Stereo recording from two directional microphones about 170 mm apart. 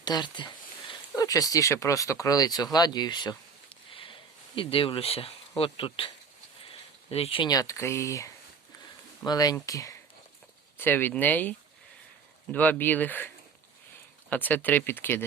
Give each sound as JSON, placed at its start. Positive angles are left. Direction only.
{"t": 0.0, "sound": "speech", "side_deg": 25}
{"t": 3.8, "sound": "a sound", "side_deg": 30}
{"t": 7.5, "sound": "speech", "side_deg": 20}